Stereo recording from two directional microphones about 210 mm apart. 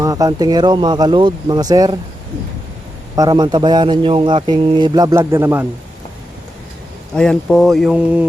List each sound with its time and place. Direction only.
0.0 s a man's voice: 15° right (ahead or behind)
3.2 s a man's voice: 20° right (ahead or behind)
7.1 s speech: 5° left (ahead or behind)